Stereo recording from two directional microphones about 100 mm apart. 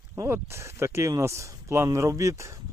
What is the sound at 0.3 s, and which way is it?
Speech, 25° right (ahead or behind).